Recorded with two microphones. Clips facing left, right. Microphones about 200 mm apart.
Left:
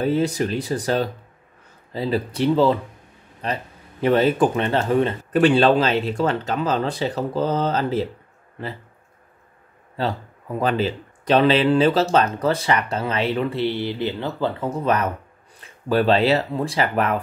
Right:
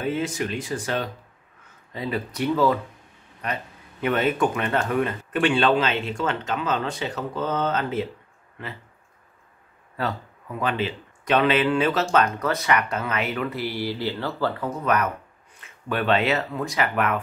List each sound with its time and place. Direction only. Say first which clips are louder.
0.0 s speech: left 5 dB; 35° left (ahead or behind)
9.9 s speech: left 3 dB; 30° left (ahead or behind)